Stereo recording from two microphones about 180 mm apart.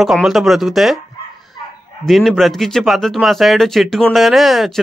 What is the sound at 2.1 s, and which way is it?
Speech, centre (ahead or behind).